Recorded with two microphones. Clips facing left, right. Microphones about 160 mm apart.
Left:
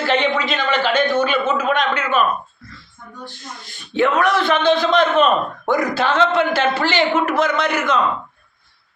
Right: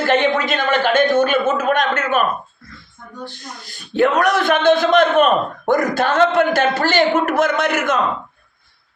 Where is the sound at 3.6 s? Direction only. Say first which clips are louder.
Right 2 dB; 35° right (ahead or behind).